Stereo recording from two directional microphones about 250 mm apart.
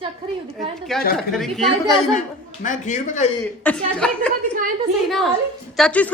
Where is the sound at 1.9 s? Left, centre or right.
Left.